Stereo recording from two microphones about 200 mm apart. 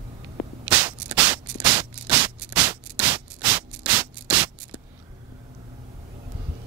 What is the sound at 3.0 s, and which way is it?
Rub, 10° right (ahead or behind).